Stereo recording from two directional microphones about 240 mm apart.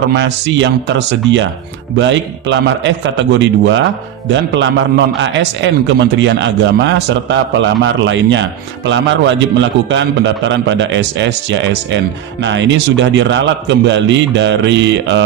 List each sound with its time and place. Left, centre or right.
0.1 s a man's voice: right